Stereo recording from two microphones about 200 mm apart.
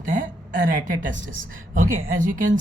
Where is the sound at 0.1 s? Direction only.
40° right (ahead or behind).